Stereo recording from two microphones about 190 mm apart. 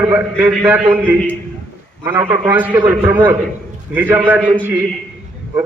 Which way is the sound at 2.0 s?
15° right (ahead or behind).